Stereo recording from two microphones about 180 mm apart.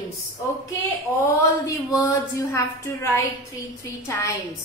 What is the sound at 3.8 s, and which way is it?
Speech, 15° left (ahead or behind).